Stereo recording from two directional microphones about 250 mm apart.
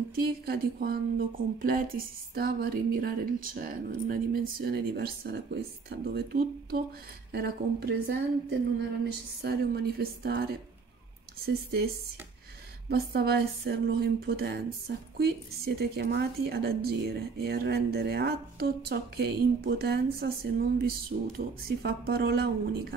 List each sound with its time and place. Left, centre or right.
0.1 s speech: right
12.9 s speech: right